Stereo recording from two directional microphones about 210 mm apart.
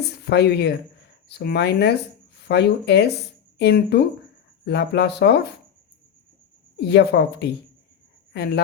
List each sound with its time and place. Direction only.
0.0 s speech: 50° left (ahead or behind)
6.7 s speech: 55° left (ahead or behind)